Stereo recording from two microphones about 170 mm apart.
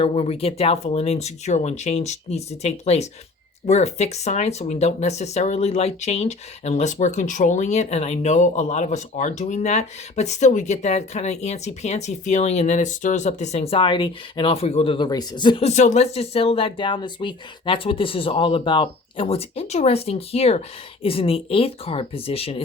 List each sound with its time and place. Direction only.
0.0 s speech: 35° left (ahead or behind)
15.6 s speech: 45° left (ahead or behind)